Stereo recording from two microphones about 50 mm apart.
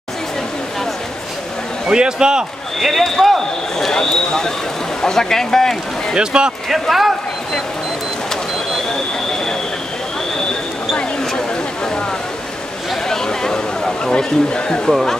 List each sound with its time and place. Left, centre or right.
1.9 s speech: centre
2.8 s speech: centre
6.1 s speech: centre
6.7 s speech: centre
11.0 s a sound: centre
13.1 s a sound: centre
14.9 s speech: centre